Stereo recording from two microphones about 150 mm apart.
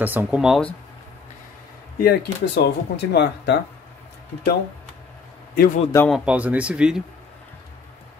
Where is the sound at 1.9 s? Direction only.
90° left.